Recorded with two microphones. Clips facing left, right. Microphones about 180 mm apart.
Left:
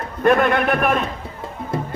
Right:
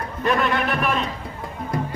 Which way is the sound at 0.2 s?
55° left (ahead or behind).